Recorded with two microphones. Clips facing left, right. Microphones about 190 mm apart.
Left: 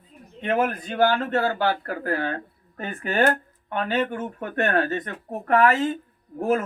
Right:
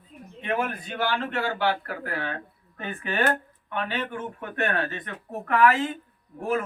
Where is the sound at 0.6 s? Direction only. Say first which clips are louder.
Left 7 dB; 45° left (ahead or behind).